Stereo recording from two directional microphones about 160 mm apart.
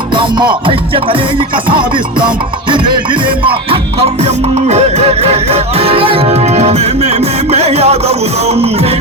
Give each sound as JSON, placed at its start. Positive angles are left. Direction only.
{"t": 0.7, "sound": "music", "side_deg": -35}